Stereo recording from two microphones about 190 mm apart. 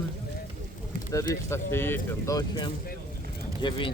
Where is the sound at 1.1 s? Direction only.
15° left (ahead or behind).